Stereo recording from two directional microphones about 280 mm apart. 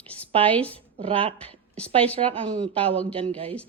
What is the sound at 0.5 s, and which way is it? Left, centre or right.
Speech, centre.